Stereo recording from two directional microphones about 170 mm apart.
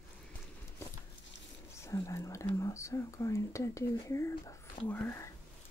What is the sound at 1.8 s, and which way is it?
Speech, 15° left (ahead or behind).